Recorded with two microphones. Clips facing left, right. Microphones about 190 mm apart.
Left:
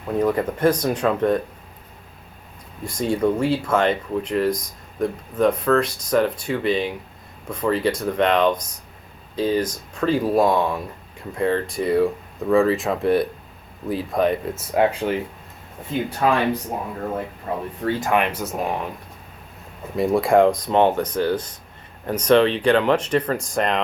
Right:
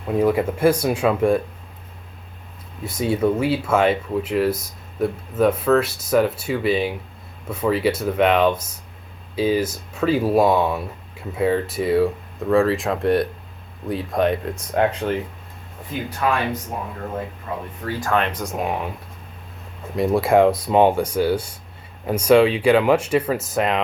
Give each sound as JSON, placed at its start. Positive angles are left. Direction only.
{"t": 0.2, "sound": "speech", "side_deg": -10}
{"t": 2.8, "sound": "speech", "side_deg": -5}
{"t": 15.9, "sound": "speech", "side_deg": 30}
{"t": 17.8, "sound": "speech", "side_deg": 20}
{"t": 20.0, "sound": "speech", "side_deg": 0}